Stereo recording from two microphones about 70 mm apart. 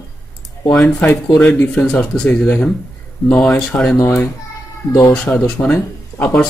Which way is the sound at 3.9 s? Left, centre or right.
Left.